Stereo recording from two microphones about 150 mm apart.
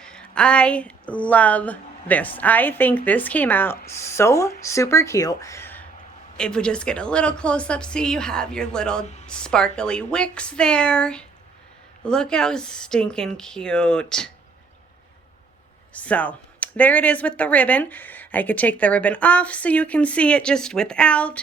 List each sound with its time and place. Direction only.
0.0 s a woman's voice: 5° left (ahead or behind)
15.9 s speech: 10° left (ahead or behind)